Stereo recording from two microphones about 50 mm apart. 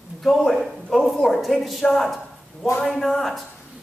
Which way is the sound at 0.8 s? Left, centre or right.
Centre.